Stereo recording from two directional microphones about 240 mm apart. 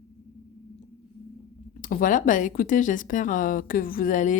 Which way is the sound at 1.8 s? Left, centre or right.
Left.